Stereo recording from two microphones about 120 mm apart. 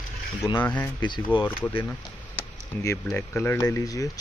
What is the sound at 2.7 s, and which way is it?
Speech, 20° left (ahead or behind).